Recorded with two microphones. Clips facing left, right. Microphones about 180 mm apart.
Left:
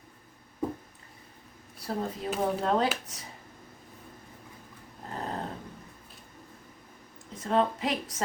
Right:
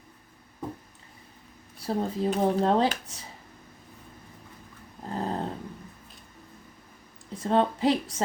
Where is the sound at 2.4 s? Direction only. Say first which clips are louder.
Right 3 dB; 30° right (ahead or behind).